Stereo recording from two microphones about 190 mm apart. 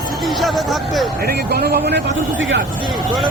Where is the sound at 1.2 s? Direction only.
55° right (ahead or behind).